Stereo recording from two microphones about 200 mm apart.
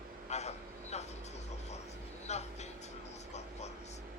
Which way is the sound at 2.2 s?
35° left (ahead or behind).